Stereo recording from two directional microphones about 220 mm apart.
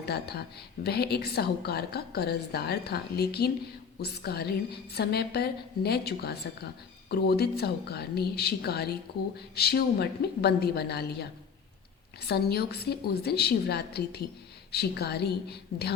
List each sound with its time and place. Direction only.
0.0 s a woman's voice: 45° left (ahead or behind)
12.3 s a woman's voice: 45° left (ahead or behind)